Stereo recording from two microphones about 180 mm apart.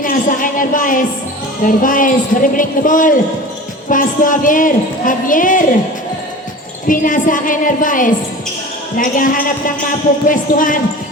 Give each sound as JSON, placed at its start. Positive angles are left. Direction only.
{"t": 0.0, "sound": "a man's voice", "side_deg": 50}
{"t": 6.8, "sound": "a man's voice", "side_deg": 50}